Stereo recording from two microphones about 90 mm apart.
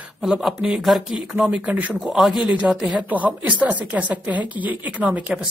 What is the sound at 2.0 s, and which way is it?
A woman's voice, centre (ahead or behind).